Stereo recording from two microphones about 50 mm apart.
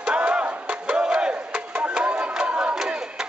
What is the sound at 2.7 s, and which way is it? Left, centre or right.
Battle cry, centre.